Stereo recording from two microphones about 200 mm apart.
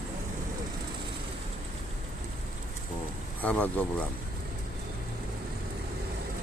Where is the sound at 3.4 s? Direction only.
5° left (ahead or behind).